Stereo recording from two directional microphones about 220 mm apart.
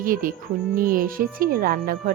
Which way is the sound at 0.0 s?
40° right (ahead or behind).